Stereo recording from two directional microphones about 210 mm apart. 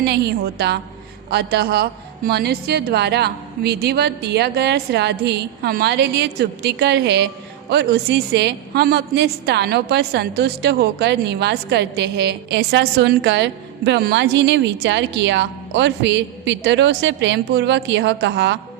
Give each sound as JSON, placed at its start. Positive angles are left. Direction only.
{"t": 0.0, "sound": "a woman's voice", "side_deg": -50}